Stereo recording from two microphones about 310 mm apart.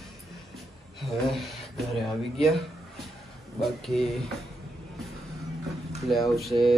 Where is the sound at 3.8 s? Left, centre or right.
Centre.